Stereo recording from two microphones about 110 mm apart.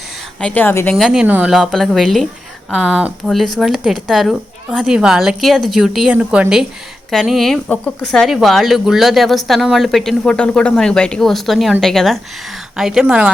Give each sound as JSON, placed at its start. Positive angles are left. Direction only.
{"t": 0.3, "sound": "a woman's voice", "side_deg": 10}
{"t": 0.9, "sound": "speech", "side_deg": 0}